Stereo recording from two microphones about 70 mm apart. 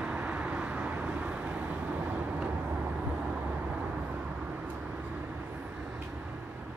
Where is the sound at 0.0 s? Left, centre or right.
Centre.